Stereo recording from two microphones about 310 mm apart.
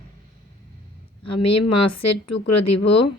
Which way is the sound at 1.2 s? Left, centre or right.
Left.